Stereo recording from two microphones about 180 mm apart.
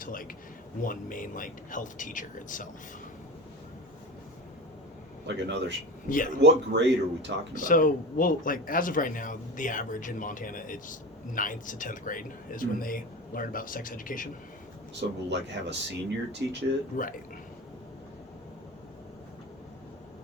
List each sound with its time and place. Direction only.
0.0 s speech: 50° left (ahead or behind)
5.2 s speech: 75° right (ahead or behind)
6.1 s speech: 45° left (ahead or behind)
6.4 s speech: 75° right (ahead or behind)
7.5 s speech: 45° left (ahead or behind)
15.3 s speech: 75° right (ahead or behind)
16.9 s speech: 50° left (ahead or behind)